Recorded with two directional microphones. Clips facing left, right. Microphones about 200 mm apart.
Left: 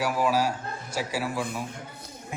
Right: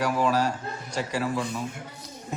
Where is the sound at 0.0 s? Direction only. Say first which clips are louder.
Right 1 dB; 10° left (ahead or behind).